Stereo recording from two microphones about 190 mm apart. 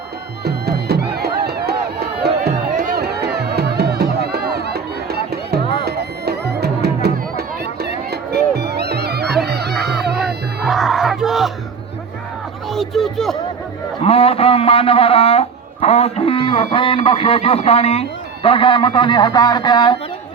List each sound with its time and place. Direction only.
0.4 s music: 55° right (ahead or behind)
9.7 s music: centre (ahead or behind)
10.7 s battle cry: centre (ahead or behind)
12.6 s a sound: centre (ahead or behind)
14.0 s a man's voice: 30° left (ahead or behind)